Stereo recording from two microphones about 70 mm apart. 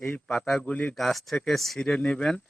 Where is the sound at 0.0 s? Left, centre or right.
Centre.